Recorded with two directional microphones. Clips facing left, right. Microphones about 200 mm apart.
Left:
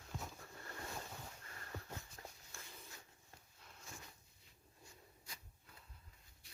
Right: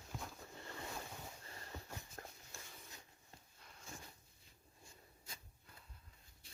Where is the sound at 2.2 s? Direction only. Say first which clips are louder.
Right 2 dB; 55° right (ahead or behind).